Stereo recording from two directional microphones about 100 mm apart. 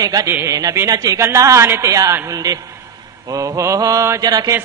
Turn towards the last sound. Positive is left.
turn(degrees=-40)  # may be behind; listen again after turning